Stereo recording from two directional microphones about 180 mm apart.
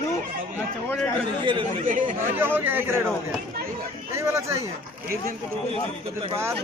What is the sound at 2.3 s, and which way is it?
Speech, 10° right (ahead or behind).